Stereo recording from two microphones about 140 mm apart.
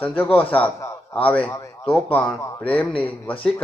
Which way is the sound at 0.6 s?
10° left (ahead or behind).